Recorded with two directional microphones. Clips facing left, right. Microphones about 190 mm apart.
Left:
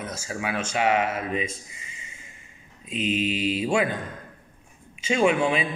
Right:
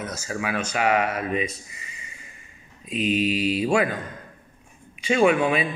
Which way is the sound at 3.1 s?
35° right (ahead or behind).